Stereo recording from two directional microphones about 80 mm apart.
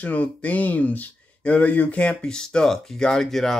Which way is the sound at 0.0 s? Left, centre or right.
Centre.